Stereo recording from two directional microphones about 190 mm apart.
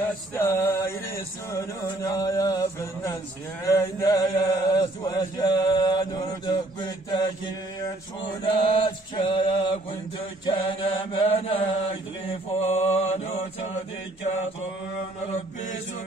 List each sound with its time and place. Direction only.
0.3 s a sound: 15° left (ahead or behind)
3.6 s mantra: 15° left (ahead or behind)
12.6 s mantra: 35° left (ahead or behind)